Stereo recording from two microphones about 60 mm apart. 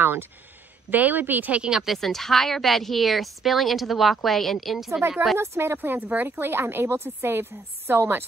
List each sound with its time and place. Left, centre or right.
0.0 s a woman's voice: right
1.6 s speech: centre
2.0 s speech: centre
5.4 s speech: right
5.9 s a woman's voice: right
6.2 s a woman's voice: right